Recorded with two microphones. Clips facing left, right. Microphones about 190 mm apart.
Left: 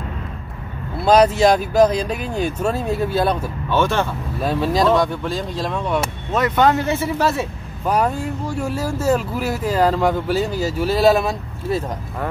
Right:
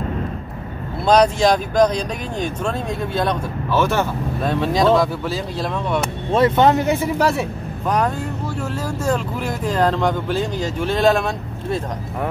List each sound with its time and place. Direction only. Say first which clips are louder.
1.0 s speech: left 1 dB; 5° left (ahead or behind)
3.7 s speech: even; 5° right (ahead or behind)
6.3 s speech: right 2 dB; 25° right (ahead or behind)
8.5 s speech: left 4 dB; 10° left (ahead or behind)